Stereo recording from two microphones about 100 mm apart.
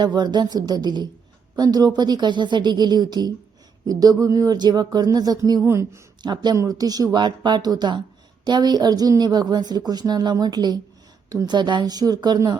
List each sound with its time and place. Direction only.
0.0 s a woman's voice: 45° right (ahead or behind)
5.6 s a woman's voice: 30° right (ahead or behind)
6.2 s a woman's voice: 45° right (ahead or behind)